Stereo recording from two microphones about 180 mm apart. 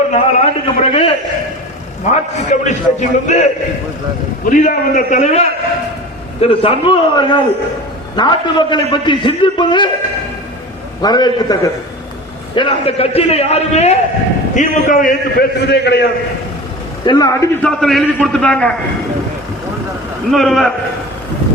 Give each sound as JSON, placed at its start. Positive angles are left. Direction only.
{"t": 0.1, "sound": "a man's voice", "side_deg": 35}
{"t": 4.4, "sound": "a man's voice", "side_deg": 50}
{"t": 11.0, "sound": "a man's voice", "side_deg": 20}
{"t": 17.1, "sound": "a man's voice", "side_deg": 20}
{"t": 17.6, "sound": "a man's voice", "side_deg": 5}
{"t": 20.3, "sound": "a man's voice", "side_deg": 0}